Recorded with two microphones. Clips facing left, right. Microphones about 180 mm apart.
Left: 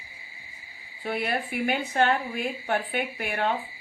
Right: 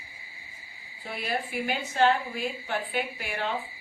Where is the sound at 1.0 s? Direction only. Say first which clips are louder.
Left 4 dB; 60° left (ahead or behind).